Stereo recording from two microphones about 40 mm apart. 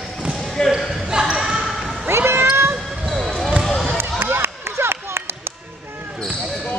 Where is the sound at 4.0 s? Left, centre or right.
Right.